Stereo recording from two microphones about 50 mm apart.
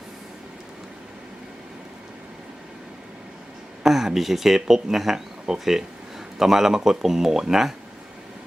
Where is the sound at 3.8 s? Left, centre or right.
Centre.